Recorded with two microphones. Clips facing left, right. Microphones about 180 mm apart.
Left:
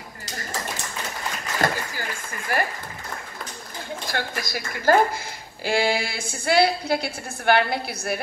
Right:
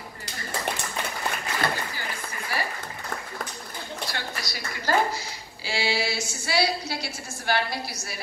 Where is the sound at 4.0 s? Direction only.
50° left (ahead or behind).